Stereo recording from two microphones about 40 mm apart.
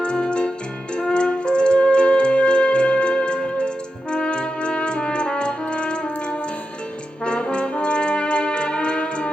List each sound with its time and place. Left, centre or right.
0.0 s music: left
4.1 s brass instrument: left